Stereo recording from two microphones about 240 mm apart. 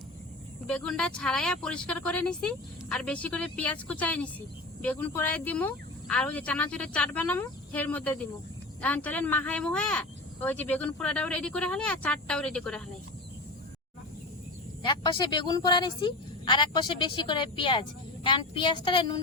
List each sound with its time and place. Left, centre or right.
0.7 s speech: centre
14.8 s a woman's voice: centre